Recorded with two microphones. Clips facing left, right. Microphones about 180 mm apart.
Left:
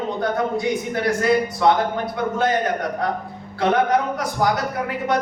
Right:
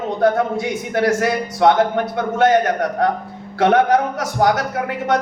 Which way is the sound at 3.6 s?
70° right (ahead or behind).